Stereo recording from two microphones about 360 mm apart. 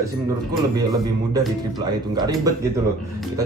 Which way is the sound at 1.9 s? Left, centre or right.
Centre.